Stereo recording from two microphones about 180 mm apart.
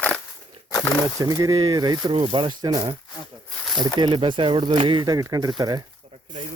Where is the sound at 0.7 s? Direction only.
20° left (ahead or behind).